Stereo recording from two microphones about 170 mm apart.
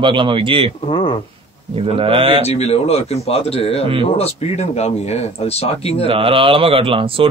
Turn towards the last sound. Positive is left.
turn(degrees=-30)  # may be behind; listen again after turning